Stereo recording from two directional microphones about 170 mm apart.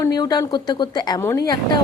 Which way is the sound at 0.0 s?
25° left (ahead or behind).